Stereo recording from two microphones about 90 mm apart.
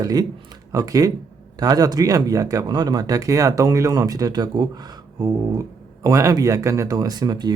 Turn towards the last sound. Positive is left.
turn(degrees=-50)  # may be behind; listen again after turning